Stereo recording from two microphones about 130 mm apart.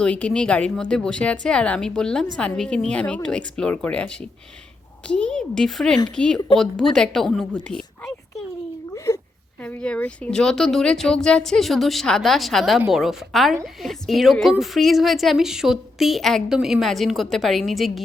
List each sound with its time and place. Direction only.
0.0 s a woman's voice: 10° left (ahead or behind)
9.1 s a sound: 25° left (ahead or behind)
9.6 s a woman's voice: 10° left (ahead or behind)